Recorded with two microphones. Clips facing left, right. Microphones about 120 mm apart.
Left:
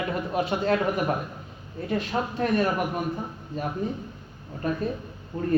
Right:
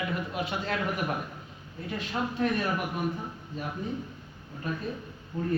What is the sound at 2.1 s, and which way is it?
Speech, 45° left (ahead or behind).